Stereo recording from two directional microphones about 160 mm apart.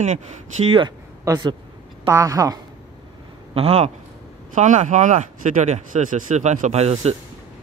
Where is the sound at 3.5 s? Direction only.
40° right (ahead or behind).